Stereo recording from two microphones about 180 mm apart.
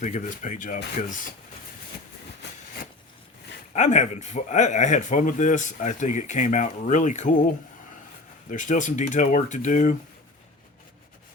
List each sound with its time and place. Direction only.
0.0 s speech: 45° left (ahead or behind)
3.8 s speech: 40° left (ahead or behind)